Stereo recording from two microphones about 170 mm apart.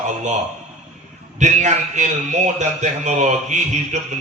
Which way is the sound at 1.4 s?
45° right (ahead or behind).